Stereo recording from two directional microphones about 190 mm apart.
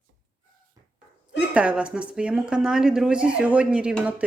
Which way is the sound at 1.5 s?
5° right (ahead or behind).